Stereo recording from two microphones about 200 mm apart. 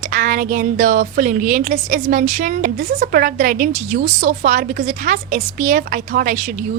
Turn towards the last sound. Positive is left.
turn(degrees=-45)  # may be behind; listen again after turning